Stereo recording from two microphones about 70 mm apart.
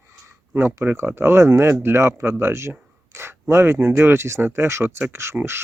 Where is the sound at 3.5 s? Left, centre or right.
Right.